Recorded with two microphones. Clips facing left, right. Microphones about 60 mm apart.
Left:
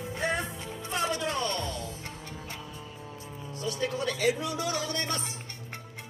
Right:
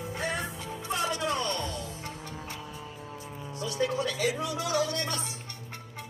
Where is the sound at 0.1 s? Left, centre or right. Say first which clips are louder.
Left 3 dB; left.